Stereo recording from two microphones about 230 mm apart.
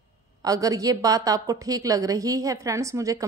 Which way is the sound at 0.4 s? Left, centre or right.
Centre.